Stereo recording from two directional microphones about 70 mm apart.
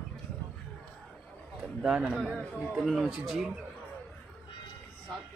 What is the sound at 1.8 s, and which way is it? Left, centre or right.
Speech, centre.